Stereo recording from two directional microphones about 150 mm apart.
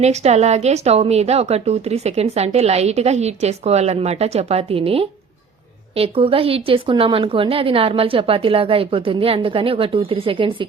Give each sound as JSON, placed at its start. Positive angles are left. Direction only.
{"t": 0.0, "sound": "a woman's voice", "side_deg": -45}